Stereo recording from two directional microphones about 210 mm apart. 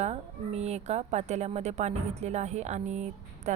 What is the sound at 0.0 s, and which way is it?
A woman's voice, 30° right (ahead or behind).